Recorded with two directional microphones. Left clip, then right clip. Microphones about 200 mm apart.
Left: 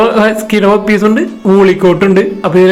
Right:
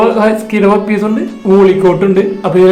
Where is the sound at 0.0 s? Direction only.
20° left (ahead or behind).